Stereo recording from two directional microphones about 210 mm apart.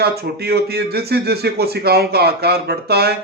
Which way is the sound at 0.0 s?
50° right (ahead or behind).